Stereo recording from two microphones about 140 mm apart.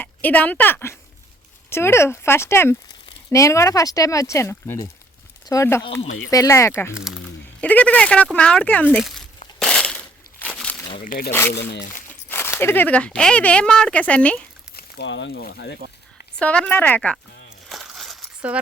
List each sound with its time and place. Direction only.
0.0 s speech: 10° left (ahead or behind)
9.6 s crushing: 5° left (ahead or behind)
11.0 s speech: 75° left (ahead or behind)
11.3 s speech: 15° left (ahead or behind)
15.3 s speech: 90° left
15.8 s speech: 90° right
16.4 s speech: 10° left (ahead or behind)
17.7 s a sound: centre (ahead or behind)